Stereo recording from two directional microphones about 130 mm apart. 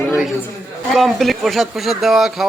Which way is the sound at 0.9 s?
Centre (ahead or behind).